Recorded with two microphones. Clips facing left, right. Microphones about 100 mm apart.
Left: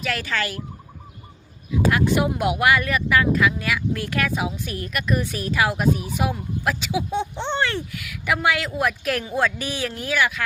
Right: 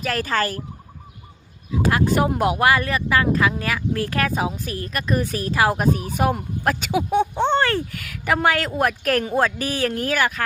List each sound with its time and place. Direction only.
0.0 s speech: 40° right (ahead or behind)
1.7 s a woman's voice: 35° right (ahead or behind)